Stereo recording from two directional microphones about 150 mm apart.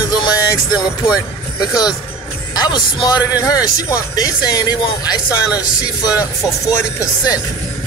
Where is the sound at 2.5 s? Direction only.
30° left (ahead or behind).